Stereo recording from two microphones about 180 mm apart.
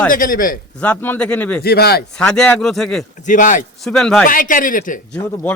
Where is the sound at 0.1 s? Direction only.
50° left (ahead or behind).